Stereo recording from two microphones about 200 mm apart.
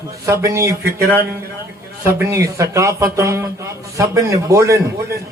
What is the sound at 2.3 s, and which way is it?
A man's voice, 15° right (ahead or behind).